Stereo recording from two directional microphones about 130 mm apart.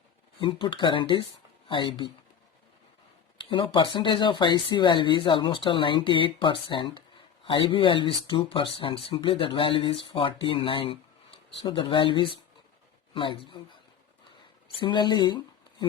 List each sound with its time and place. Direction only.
0.3 s speech: 40° left (ahead or behind)
3.3 s speech: 40° left (ahead or behind)
14.8 s speech: 35° left (ahead or behind)